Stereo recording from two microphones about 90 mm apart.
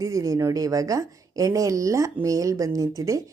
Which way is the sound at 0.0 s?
40° right (ahead or behind).